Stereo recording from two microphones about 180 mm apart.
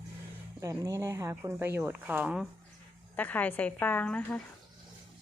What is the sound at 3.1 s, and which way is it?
A woman's voice, 10° left (ahead or behind).